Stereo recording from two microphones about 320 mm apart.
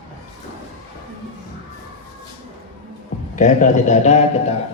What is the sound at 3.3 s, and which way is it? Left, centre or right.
A man's voice, left.